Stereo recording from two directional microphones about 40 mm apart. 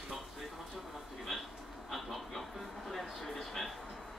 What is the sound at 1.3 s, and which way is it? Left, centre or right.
Vehicle, centre.